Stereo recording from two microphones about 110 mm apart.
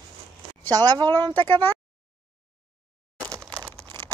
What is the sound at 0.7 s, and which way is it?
Speech, 40° right (ahead or behind).